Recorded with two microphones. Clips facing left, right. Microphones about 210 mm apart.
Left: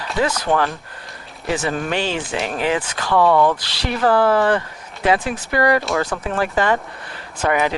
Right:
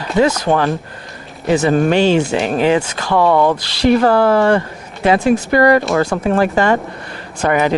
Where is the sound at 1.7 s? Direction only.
40° right (ahead or behind).